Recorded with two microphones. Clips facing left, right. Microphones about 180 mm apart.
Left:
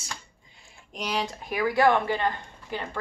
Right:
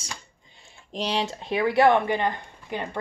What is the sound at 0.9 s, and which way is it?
Speech, 30° right (ahead or behind).